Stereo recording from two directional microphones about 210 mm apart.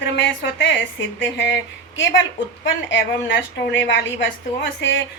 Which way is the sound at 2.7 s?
60° left (ahead or behind).